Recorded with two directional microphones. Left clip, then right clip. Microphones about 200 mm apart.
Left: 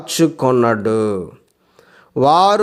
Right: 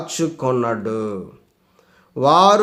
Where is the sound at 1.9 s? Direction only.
35° left (ahead or behind).